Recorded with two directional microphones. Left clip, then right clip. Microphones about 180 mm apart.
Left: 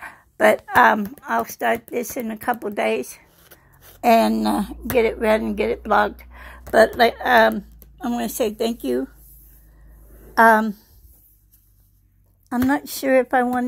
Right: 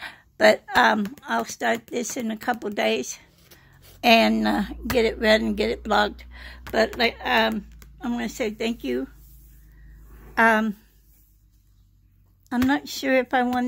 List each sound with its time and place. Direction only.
0.0 s a sound: 20° right (ahead or behind)
0.4 s speech: 10° right (ahead or behind)
1.7 s speech: 30° right (ahead or behind)
2.3 s speech: 15° right (ahead or behind)
2.6 s a sound: 30° right (ahead or behind)
4.0 s speech: centre (ahead or behind)
4.9 s speech: 10° right (ahead or behind)
7.0 s a woman's voice: 15° left (ahead or behind)
10.3 s a woman's voice: 10° left (ahead or behind)
12.6 s speech: centre (ahead or behind)